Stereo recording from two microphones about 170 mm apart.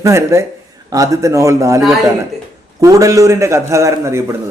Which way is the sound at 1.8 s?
Centre (ahead or behind).